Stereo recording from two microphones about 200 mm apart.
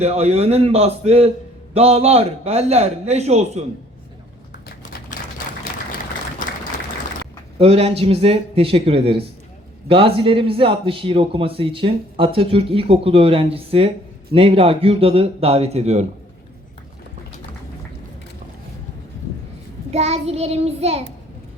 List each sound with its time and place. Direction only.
0.0 s a man's voice: 30° right (ahead or behind)
7.6 s a man's voice: 30° right (ahead or behind)
19.9 s a man's voice: 30° right (ahead or behind)